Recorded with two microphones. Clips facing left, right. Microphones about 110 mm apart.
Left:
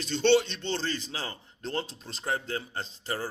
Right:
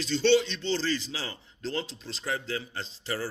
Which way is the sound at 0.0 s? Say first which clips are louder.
Even; 50° left (ahead or behind).